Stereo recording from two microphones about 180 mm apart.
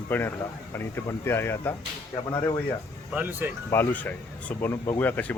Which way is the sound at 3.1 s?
10° right (ahead or behind).